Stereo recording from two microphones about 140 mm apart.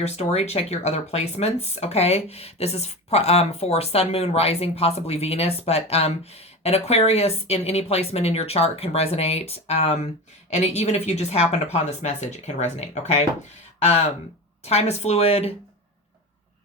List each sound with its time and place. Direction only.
0.0 s speech: 50° left (ahead or behind)
14.6 s speech: 50° left (ahead or behind)